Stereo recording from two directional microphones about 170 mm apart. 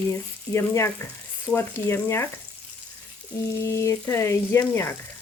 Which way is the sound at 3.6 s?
15° left (ahead or behind).